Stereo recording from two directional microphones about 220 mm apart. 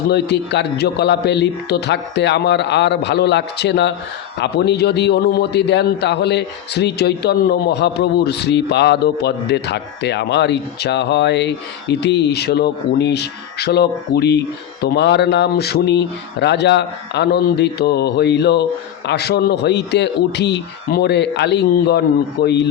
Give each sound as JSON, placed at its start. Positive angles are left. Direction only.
{"t": 0.1, "sound": "a man's voice", "side_deg": 50}